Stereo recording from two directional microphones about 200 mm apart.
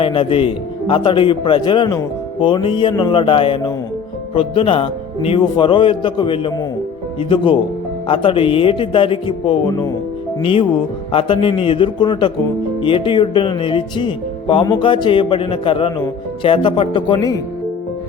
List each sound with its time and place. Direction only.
0.0 s speech: 25° left (ahead or behind)